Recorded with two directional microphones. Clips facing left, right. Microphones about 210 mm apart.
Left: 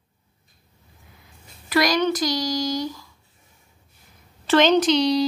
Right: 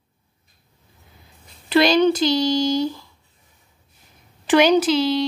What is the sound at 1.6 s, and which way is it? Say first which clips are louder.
Speech: right 5 dB; 25° right (ahead or behind).